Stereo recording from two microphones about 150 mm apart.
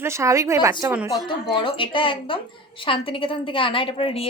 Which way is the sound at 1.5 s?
35° left (ahead or behind).